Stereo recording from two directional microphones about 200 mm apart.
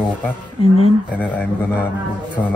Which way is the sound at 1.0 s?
5° left (ahead or behind).